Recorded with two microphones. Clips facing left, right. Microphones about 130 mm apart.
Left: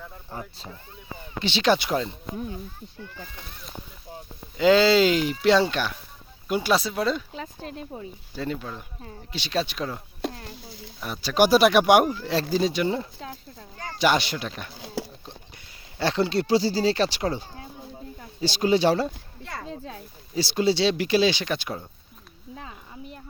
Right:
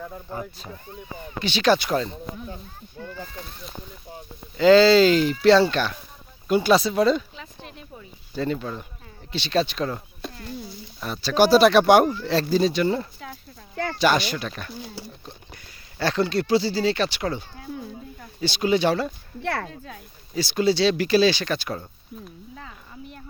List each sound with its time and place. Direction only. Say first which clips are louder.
1.4 s speech: right 2 dB; 25° left (ahead or behind)
3.0 s speech: right 6 dB; 50° right (ahead or behind)
4.5 s speech: right 4 dB; 15° left (ahead or behind)
7.3 s speech: left 6 dB; 40° left (ahead or behind)
8.4 s speech: right 4 dB; 5° left (ahead or behind)
10.2 s speech: left 7 dB; 90° left
11.0 s speech: right 2 dB; 15° left (ahead or behind)
16.0 s speech: right 1 dB; 25° left (ahead or behind)
19.4 s speech: right 10 dB; 70° right (ahead or behind)
19.7 s speech: left 3 dB; 30° left (ahead or behind)